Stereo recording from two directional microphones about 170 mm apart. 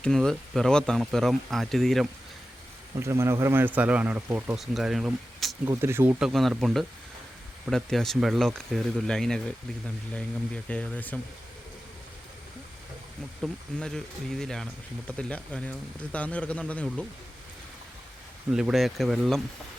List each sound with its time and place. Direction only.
0.0 s speech: 5° left (ahead or behind)
3.0 s speech: 15° right (ahead or behind)
4.5 s speech: centre (ahead or behind)
5.6 s speech: 15° right (ahead or behind); by 11.2 s 10° left (ahead or behind)
13.4 s speech: 5° left (ahead or behind)
18.5 s speech: centre (ahead or behind)